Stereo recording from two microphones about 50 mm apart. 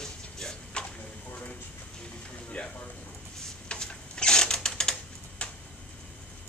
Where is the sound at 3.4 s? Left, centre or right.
Centre.